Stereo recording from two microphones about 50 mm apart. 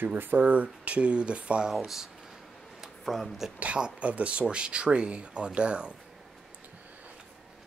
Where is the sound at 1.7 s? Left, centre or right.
Centre.